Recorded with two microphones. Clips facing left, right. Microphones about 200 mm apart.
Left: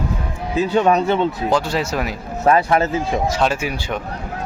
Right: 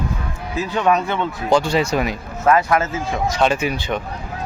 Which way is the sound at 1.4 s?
5° left (ahead or behind).